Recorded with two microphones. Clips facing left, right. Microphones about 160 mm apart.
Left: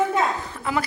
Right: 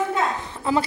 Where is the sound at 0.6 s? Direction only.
30° right (ahead or behind).